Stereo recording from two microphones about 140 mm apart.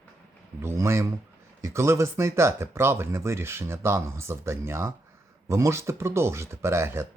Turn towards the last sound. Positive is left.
turn(degrees=-20)  # may be behind; listen again after turning